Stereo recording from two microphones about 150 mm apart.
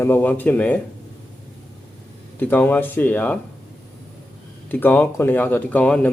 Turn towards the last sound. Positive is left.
turn(degrees=10)  # may be behind; listen again after turning